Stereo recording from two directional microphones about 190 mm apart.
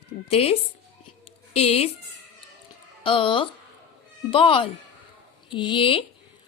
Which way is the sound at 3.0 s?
25° left (ahead or behind).